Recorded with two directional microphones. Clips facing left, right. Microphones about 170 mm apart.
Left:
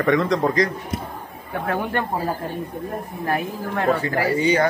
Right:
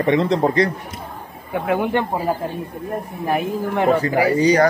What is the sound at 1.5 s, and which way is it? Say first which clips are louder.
Speech: right 5 dB; 15° right (ahead or behind).